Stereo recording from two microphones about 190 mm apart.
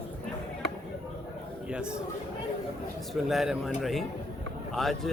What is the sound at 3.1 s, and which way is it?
Speech, centre (ahead or behind).